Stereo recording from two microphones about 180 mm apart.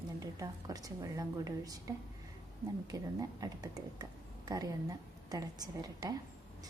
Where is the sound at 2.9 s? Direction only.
20° right (ahead or behind).